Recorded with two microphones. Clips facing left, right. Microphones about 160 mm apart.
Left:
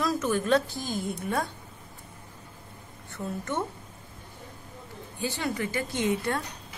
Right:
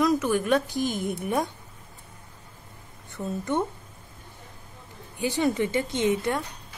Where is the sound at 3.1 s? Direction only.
15° right (ahead or behind).